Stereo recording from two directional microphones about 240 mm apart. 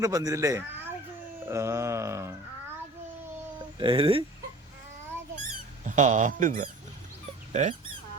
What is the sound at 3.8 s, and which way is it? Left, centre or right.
Speech, right.